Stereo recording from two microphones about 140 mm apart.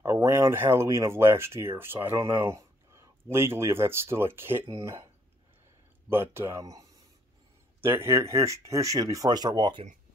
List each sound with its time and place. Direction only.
0.0 s speech: 15° right (ahead or behind)
6.0 s speech: 15° right (ahead or behind)